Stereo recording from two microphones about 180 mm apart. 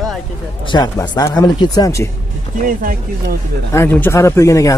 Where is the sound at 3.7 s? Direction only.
10° left (ahead or behind).